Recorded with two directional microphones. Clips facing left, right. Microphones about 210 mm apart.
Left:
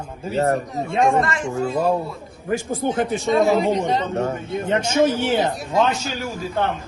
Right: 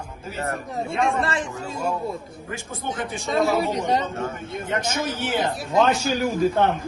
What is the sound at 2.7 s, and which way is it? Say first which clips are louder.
Speech: left 7 dB; 30° left (ahead or behind).